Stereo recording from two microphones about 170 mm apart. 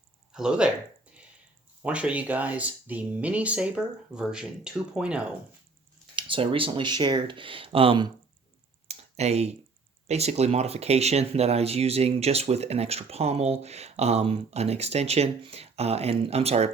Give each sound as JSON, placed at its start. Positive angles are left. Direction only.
{"t": 0.3, "sound": "speech", "side_deg": -5}
{"t": 1.8, "sound": "speech", "side_deg": -5}
{"t": 6.1, "sound": "speech", "side_deg": -30}
{"t": 8.9, "sound": "a sound", "side_deg": -40}
{"t": 10.1, "sound": "speech", "side_deg": -40}